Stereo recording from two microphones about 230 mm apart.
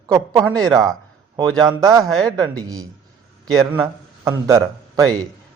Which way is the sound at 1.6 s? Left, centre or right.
Centre.